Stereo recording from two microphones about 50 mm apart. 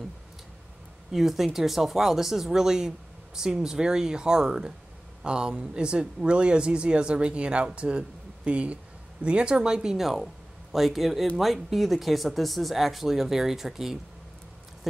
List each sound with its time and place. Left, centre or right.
1.1 s speech: centre